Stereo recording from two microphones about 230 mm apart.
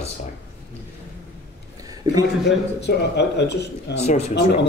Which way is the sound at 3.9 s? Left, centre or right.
Left.